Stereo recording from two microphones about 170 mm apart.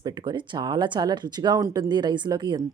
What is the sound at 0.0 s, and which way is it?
Speech, 25° right (ahead or behind).